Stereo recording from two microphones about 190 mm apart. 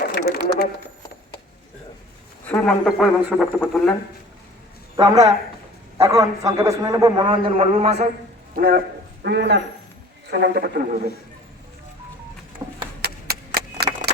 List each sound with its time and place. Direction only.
0.1 s a sound: 55° left (ahead or behind)
2.5 s speech: 5° left (ahead or behind)
4.9 s a man's voice: 20° right (ahead or behind)
7.2 s a man's voice: 30° right (ahead or behind)
8.5 s speech: 50° right (ahead or behind)
9.2 s a man's voice: 65° right (ahead or behind)
13.0 s a sound: 55° right (ahead or behind)